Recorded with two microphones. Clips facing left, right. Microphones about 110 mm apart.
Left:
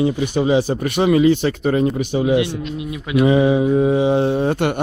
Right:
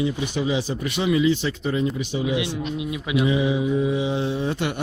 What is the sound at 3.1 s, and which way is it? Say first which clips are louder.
Speech: left 7 dB; 55° left (ahead or behind).